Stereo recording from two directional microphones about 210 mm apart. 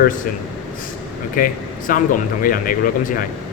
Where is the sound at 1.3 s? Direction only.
40° left (ahead or behind).